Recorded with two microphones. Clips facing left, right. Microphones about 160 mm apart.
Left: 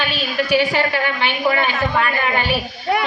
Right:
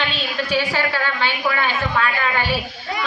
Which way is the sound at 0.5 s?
20° left (ahead or behind).